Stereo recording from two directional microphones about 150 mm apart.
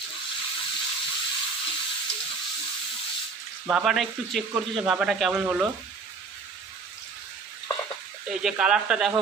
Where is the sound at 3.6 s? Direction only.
5° right (ahead or behind).